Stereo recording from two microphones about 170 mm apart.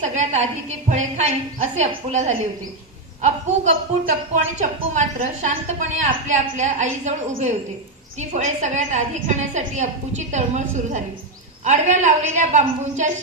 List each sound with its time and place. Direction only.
0.0 s a woman's voice: 45° right (ahead or behind)